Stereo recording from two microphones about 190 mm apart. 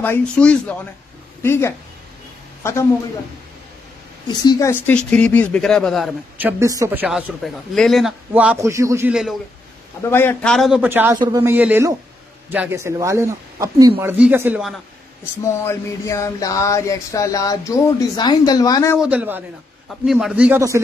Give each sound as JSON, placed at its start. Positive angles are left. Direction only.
{"t": 0.0, "sound": "a man's voice", "side_deg": 10}
{"t": 4.3, "sound": "a sound", "side_deg": 20}
{"t": 6.3, "sound": "a woman's voice", "side_deg": -10}
{"t": 10.0, "sound": "a man's voice", "side_deg": 10}
{"t": 15.4, "sound": "a sound", "side_deg": 15}
{"t": 18.9, "sound": "a woman's voice", "side_deg": -5}